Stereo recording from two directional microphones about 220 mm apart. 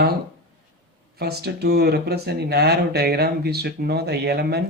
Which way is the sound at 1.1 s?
45° right (ahead or behind).